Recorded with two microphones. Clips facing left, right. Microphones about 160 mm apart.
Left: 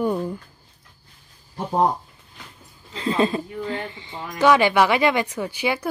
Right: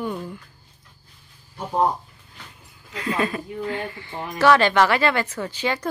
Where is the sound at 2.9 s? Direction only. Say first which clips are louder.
Left 3 dB; 30° left (ahead or behind); by 5.8 s 10° left (ahead or behind).